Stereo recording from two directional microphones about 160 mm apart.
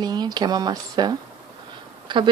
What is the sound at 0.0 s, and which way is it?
Speech, 25° right (ahead or behind).